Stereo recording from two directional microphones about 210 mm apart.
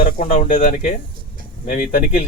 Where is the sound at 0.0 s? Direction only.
35° left (ahead or behind).